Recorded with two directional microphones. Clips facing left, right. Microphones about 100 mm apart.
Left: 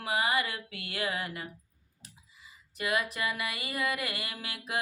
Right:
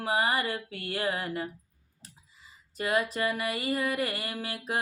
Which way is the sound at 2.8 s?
35° right (ahead or behind).